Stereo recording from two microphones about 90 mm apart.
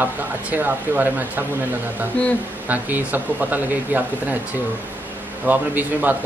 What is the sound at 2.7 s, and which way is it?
Speech, 20° right (ahead or behind).